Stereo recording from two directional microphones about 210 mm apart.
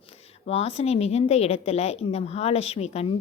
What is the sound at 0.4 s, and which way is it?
A woman's voice, 30° left (ahead or behind).